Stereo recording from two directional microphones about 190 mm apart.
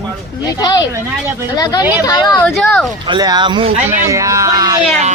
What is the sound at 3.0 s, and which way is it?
Speech, 20° right (ahead or behind).